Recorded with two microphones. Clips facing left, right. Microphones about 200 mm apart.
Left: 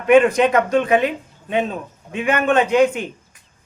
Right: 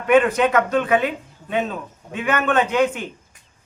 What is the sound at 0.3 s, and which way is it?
A woman's voice, 10° left (ahead or behind).